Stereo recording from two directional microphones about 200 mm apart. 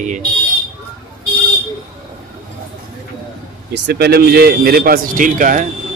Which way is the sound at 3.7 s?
55° right (ahead or behind).